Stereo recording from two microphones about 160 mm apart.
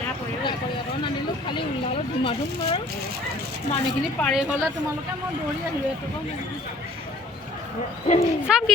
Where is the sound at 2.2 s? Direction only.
30° left (ahead or behind).